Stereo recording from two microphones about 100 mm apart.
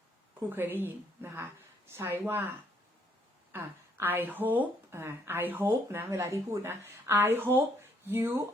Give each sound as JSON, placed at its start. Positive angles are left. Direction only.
{"t": 0.5, "sound": "a woman's voice", "side_deg": -20}